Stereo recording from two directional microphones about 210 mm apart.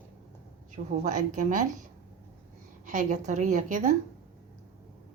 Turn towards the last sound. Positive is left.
turn(degrees=-35)  # may be behind; listen again after turning